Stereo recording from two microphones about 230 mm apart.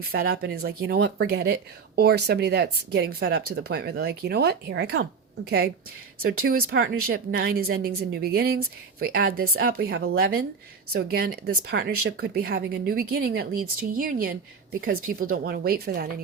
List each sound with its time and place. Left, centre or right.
0.0 s speech: right